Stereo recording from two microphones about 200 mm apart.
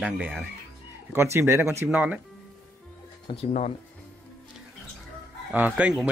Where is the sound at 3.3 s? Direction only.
30° left (ahead or behind).